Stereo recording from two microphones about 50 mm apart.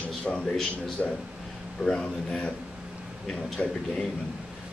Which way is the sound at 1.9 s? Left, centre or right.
Centre.